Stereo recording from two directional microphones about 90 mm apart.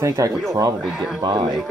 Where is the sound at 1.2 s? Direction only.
55° right (ahead or behind).